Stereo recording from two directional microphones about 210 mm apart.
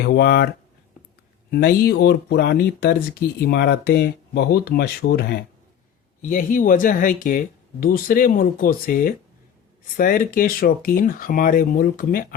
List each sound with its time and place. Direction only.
0.0 s speech: 50° left (ahead or behind)